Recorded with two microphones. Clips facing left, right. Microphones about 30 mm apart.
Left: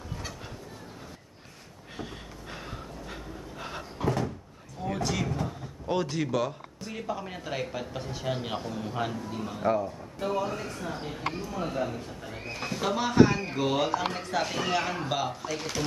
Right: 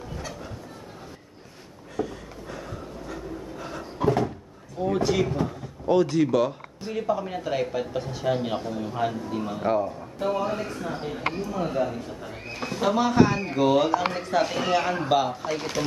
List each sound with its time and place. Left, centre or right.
2.0 s a sound: left
4.0 s cupboard open or close: centre
4.9 s speech: centre
5.9 s a man's voice: centre